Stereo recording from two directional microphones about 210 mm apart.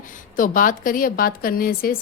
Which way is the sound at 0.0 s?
40° left (ahead or behind).